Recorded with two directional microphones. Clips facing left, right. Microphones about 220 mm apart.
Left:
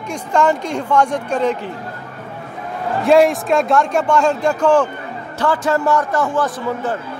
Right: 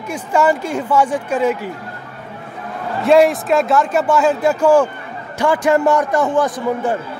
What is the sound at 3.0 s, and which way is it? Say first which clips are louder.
A man's voice: right 1 dB; centre (ahead or behind).